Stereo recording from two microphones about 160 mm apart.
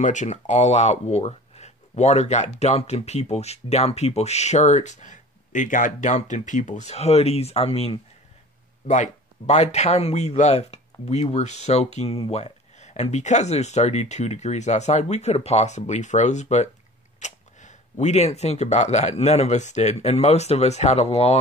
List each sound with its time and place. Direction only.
0.0 s speech: 50° left (ahead or behind)